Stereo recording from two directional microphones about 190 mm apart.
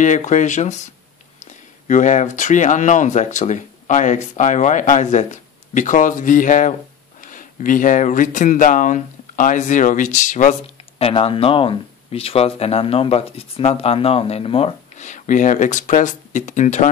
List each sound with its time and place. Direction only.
0.0 s speech: 40° left (ahead or behind)
1.9 s speech: 40° left (ahead or behind)